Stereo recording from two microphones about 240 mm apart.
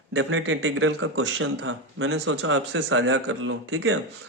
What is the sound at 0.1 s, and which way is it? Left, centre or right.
Speech, right.